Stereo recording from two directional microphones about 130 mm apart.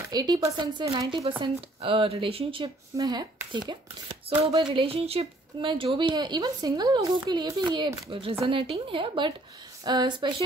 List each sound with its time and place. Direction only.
0.1 s speech: 30° right (ahead or behind)
4.3 s speech: 45° right (ahead or behind)